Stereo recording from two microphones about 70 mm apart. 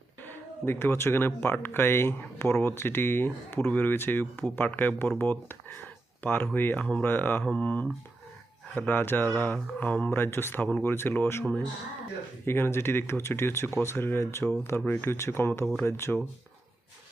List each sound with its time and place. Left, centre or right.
0.3 s speech: left
7.4 s speech: centre
8.9 s speech: left
12.5 s speech: left